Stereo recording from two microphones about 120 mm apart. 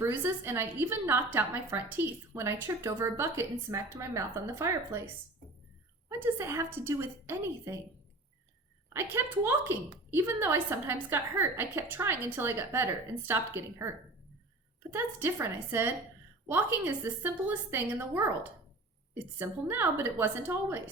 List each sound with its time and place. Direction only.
0.0 s a woman's voice: 20° right (ahead or behind)
6.1 s a woman's voice: 20° right (ahead or behind)
8.9 s a woman's voice: 20° right (ahead or behind)
19.4 s a woman's voice: 20° right (ahead or behind)